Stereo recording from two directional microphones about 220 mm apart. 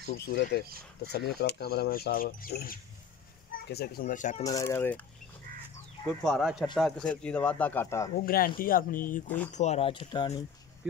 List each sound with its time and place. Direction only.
0.0 s speech: 45° left (ahead or behind)
4.4 s speech: 15° left (ahead or behind)
6.2 s speech: centre (ahead or behind)
8.3 s speech: 40° left (ahead or behind); by 10.4 s 20° left (ahead or behind)